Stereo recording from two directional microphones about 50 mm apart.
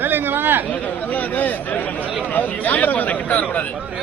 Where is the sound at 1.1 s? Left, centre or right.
Left.